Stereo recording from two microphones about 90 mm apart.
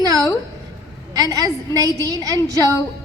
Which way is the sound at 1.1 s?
40° right (ahead or behind).